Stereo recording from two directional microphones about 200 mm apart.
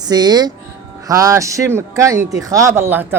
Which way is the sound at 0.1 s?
20° right (ahead or behind).